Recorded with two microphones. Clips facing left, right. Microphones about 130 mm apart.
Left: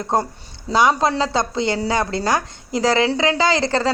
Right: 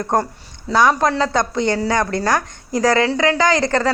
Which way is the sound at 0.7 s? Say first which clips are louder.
Right 1 dB; 20° left (ahead or behind).